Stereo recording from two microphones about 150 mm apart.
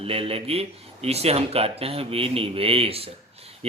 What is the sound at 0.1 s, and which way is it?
A man's voice, 40° right (ahead or behind).